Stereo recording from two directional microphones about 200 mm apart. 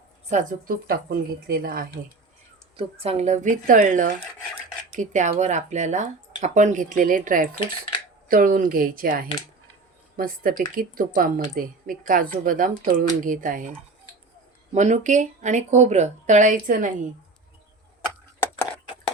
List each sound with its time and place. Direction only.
0.3 s speech: 40° right (ahead or behind)
2.7 s speech: 30° right (ahead or behind)